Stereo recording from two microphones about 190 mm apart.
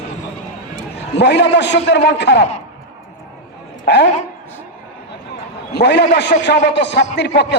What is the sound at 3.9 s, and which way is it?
Speech, 60° left (ahead or behind).